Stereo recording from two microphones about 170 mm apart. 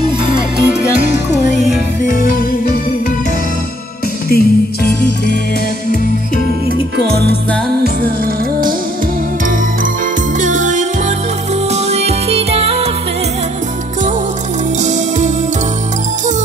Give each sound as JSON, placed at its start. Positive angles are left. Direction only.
{"t": 2.0, "sound": "music", "side_deg": 50}
{"t": 4.3, "sound": "music", "side_deg": 65}
{"t": 5.9, "sound": "music", "side_deg": 55}
{"t": 10.4, "sound": "music", "side_deg": -45}
{"t": 14.8, "sound": "music", "side_deg": -45}